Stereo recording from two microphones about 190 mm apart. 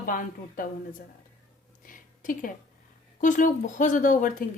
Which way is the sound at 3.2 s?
40° left (ahead or behind).